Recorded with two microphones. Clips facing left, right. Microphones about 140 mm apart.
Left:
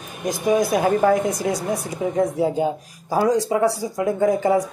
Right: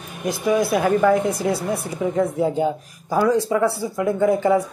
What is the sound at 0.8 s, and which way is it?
Speech, 35° left (ahead or behind).